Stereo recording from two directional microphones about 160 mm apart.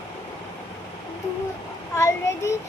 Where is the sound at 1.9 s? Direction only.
15° left (ahead or behind).